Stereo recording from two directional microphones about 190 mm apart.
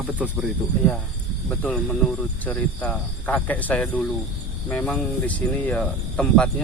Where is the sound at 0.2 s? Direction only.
5° right (ahead or behind).